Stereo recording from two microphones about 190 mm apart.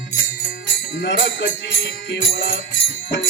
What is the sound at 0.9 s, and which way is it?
Music, 65° left (ahead or behind).